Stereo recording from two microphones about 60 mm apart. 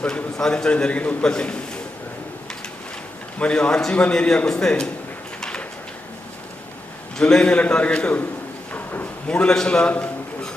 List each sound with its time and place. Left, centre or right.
0.0 s a man's voice: centre
3.3 s a man's voice: centre
5.4 s a sound: centre
7.2 s a man's voice: centre
8.7 s drawer open or close: left
9.2 s a man's voice: centre